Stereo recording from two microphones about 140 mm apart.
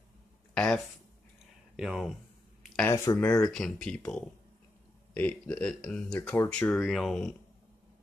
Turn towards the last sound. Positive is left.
turn(degrees=5)  # may be behind; listen again after turning